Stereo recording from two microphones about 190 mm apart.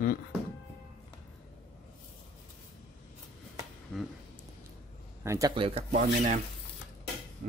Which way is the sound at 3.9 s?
5° left (ahead or behind).